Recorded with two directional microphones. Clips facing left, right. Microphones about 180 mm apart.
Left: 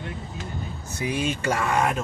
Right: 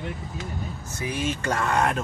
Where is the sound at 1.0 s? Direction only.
15° left (ahead or behind).